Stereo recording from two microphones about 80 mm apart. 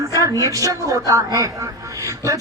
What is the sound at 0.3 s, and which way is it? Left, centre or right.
A woman's voice, right.